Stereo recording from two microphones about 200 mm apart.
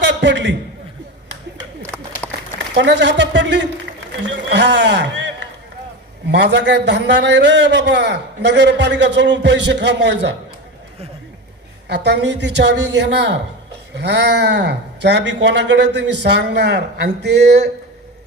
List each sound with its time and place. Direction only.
0.1 s a man's voice: 65° right (ahead or behind)
2.7 s a man's voice: 60° right (ahead or behind)
6.3 s a man's voice: 60° right (ahead or behind)
11.9 s a man's voice: 60° right (ahead or behind)